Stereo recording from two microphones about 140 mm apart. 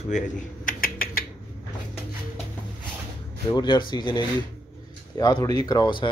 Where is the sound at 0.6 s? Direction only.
90° left.